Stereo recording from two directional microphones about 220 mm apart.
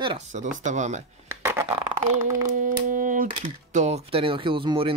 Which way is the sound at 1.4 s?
10° right (ahead or behind).